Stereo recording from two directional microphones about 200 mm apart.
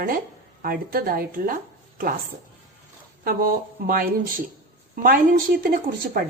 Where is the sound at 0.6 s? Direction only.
45° right (ahead or behind).